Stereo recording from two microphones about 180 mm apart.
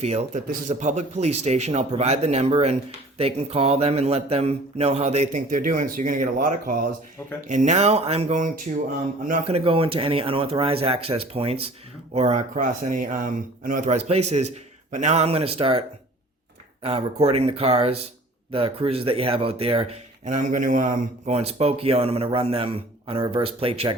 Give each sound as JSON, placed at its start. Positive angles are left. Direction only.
{"t": 0.0, "sound": "speech", "side_deg": -35}
{"t": 9.5, "sound": "speech", "side_deg": -30}
{"t": 16.8, "sound": "speech", "side_deg": -35}
{"t": 20.2, "sound": "speech", "side_deg": -45}